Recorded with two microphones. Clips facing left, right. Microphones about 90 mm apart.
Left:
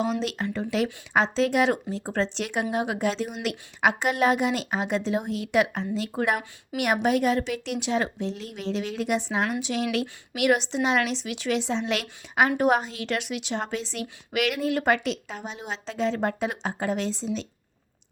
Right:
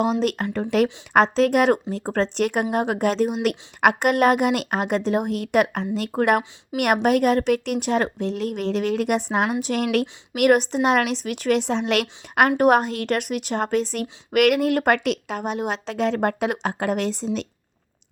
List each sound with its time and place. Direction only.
0.0 s speech: 55° right (ahead or behind)